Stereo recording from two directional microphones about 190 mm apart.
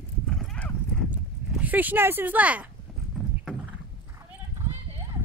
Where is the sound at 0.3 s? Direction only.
Centre (ahead or behind).